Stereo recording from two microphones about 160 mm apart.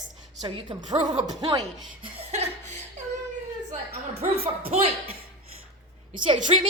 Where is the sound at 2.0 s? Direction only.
35° right (ahead or behind).